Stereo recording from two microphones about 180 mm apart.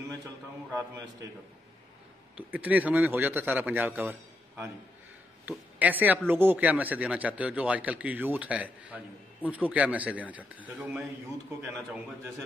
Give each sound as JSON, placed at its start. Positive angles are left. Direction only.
{"t": 2.3, "sound": "speech", "side_deg": -10}